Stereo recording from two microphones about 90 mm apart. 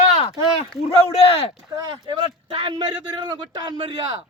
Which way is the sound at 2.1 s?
70° right (ahead or behind).